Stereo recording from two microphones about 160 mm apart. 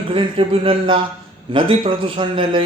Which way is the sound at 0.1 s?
35° right (ahead or behind).